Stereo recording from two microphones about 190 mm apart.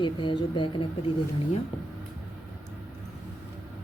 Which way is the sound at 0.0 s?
25° left (ahead or behind).